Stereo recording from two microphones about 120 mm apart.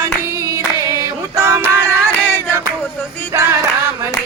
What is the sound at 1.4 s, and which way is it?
Music, 25° right (ahead or behind).